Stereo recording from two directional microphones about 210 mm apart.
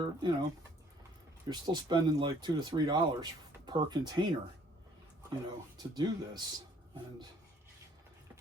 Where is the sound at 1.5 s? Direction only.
20° right (ahead or behind).